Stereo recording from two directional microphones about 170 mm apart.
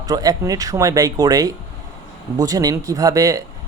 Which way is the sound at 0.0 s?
20° right (ahead or behind).